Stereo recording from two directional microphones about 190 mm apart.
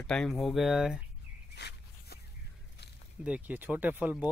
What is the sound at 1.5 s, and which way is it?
Walk, 60° left (ahead or behind).